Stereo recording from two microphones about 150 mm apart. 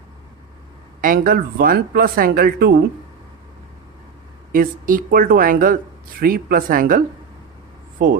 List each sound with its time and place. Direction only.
1.0 s speech: 70° right (ahead or behind)
4.5 s speech: 70° right (ahead or behind)